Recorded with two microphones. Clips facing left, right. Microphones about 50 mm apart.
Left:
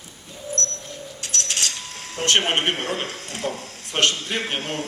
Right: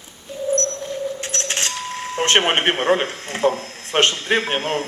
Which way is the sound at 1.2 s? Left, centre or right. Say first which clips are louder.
Right 3 dB; right.